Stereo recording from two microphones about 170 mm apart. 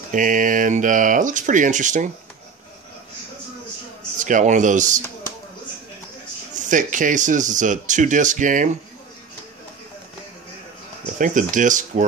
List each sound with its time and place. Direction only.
0.1 s speech: 50° right (ahead or behind)
4.2 s speech: 45° right (ahead or behind)
6.5 s speech: 50° right (ahead or behind)
11.1 s speech: 50° right (ahead or behind)